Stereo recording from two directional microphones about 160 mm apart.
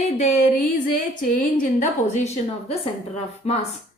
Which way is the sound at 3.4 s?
40° left (ahead or behind).